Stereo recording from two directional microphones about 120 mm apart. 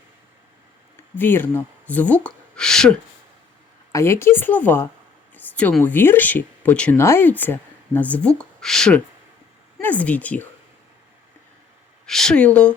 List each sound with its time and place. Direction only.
1.1 s speech: 15° left (ahead or behind)
3.9 s speech: 20° left (ahead or behind)
5.3 s a sound: 15° left (ahead or behind)
5.8 s speech: 15° left (ahead or behind)
12.0 s speech: 5° left (ahead or behind)